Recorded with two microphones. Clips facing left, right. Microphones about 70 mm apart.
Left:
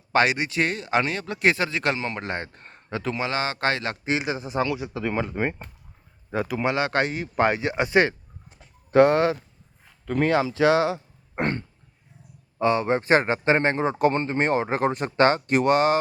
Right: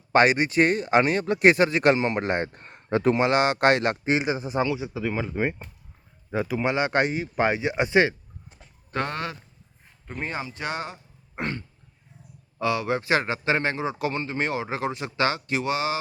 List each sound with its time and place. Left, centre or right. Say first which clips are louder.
0.1 s speech: right 2 dB; right
2.5 s speech: right 1 dB; centre
2.9 s speech: right 6 dB; right
4.0 s speech: right 2 dB; right
5.0 s speech: left 1 dB; centre
6.5 s speech: even; centre
10.1 s speech: left 10 dB; left
11.3 s throat clearing: left 5 dB; left
12.5 s speech: left 3 dB; left